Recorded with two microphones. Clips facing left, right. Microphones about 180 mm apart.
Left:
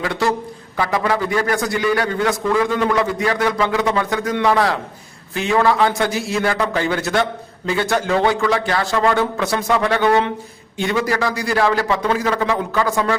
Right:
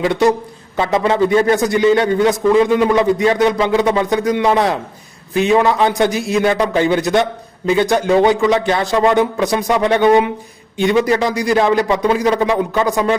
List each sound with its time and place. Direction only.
0.0 s a man's voice: 20° right (ahead or behind)